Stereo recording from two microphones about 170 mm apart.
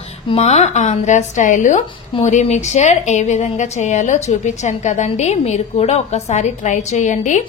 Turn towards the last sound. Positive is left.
turn(degrees=45)  # may be behind; listen again after turning